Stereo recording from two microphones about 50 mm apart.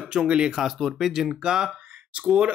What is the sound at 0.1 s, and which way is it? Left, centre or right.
Speech, centre.